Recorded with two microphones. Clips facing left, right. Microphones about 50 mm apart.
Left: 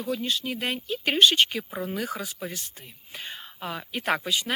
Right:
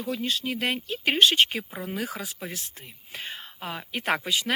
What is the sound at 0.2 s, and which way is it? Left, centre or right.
Speech, right.